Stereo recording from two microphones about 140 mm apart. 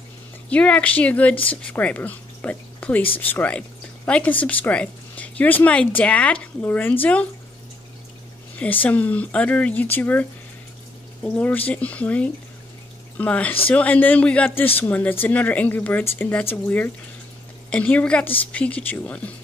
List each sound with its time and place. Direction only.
0.5 s speech: 10° left (ahead or behind)
1.3 s speech: 40° left (ahead or behind)
1.7 s speech: 10° left (ahead or behind)
8.8 s speech: 10° left (ahead or behind)
11.2 s speech: 10° left (ahead or behind)